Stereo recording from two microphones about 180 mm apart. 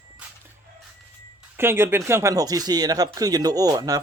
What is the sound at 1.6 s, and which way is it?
Speech, 15° right (ahead or behind).